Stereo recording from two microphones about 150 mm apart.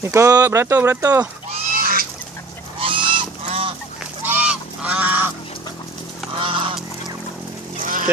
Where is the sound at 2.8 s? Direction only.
35° right (ahead or behind).